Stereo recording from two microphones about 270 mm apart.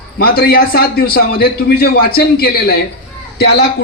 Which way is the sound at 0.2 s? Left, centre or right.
Left.